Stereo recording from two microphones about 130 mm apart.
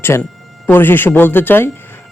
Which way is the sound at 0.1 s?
20° left (ahead or behind).